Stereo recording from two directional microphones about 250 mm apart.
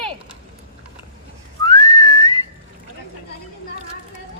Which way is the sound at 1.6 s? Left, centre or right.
Centre.